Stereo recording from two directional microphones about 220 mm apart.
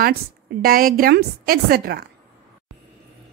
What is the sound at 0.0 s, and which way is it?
A woman's voice, 45° right (ahead or behind).